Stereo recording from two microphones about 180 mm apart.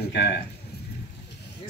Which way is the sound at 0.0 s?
70° left (ahead or behind).